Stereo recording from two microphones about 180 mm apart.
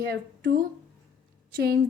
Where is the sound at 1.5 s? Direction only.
60° right (ahead or behind).